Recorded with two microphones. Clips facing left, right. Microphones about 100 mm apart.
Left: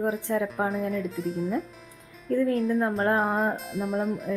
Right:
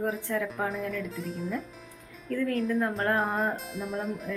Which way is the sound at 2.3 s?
25° left (ahead or behind).